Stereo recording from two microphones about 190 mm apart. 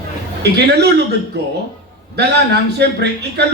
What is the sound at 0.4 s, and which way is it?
Speech, 60° right (ahead or behind).